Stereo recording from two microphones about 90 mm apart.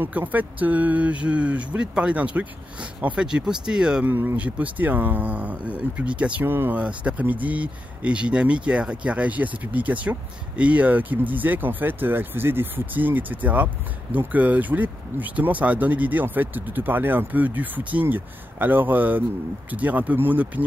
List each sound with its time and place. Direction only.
0.0 s speech: 20° right (ahead or behind)
4.1 s speech: 25° right (ahead or behind)
6.4 s speech: 25° right (ahead or behind)
6.8 s speech: 15° right (ahead or behind)